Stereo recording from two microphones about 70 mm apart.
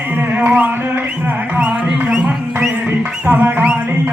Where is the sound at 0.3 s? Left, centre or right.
Right.